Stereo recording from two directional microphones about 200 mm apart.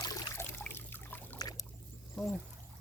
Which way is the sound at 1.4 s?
20° left (ahead or behind).